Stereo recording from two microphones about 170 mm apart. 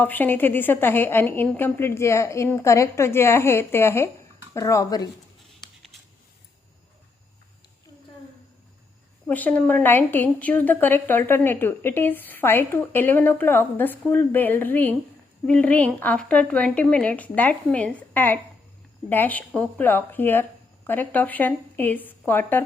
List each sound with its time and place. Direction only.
0.0 s a woman's voice: 10° left (ahead or behind)
5.5 s a sound: centre (ahead or behind)
9.2 s a woman's voice: 10° left (ahead or behind)